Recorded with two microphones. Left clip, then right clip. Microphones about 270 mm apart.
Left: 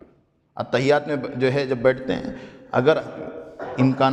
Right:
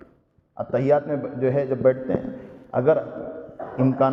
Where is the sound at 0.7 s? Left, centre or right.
Left.